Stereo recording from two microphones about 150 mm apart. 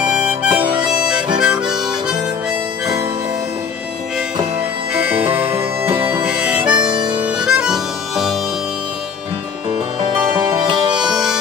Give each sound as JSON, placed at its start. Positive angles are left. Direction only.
{"t": 0.0, "sound": "harmonica", "side_deg": -10}
{"t": 5.1, "sound": "music", "side_deg": -15}
{"t": 6.2, "sound": "harmonica", "side_deg": -10}
{"t": 9.9, "sound": "music", "side_deg": -30}
{"t": 11.0, "sound": "music", "side_deg": -5}